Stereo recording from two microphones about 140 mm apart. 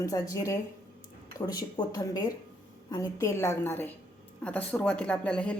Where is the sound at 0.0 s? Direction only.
25° left (ahead or behind).